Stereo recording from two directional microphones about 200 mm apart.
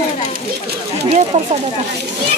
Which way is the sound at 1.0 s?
30° right (ahead or behind).